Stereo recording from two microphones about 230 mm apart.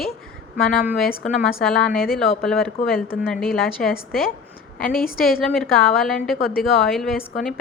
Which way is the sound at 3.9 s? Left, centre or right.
Left.